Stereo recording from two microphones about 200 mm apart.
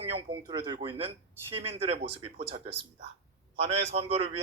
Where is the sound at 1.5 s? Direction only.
30° right (ahead or behind).